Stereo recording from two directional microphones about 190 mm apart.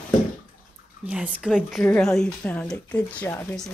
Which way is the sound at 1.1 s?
5° right (ahead or behind).